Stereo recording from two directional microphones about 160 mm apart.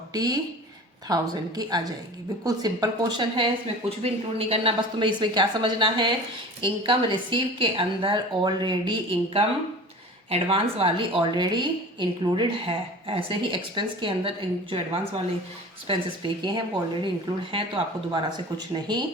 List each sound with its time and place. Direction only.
0.1 s a woman's voice: 25° right (ahead or behind)
18.1 s speech: 30° right (ahead or behind)